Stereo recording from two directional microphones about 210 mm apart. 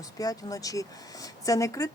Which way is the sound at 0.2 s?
15° left (ahead or behind).